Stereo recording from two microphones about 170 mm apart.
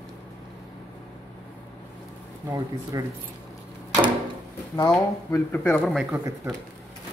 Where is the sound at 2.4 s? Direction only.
20° right (ahead or behind).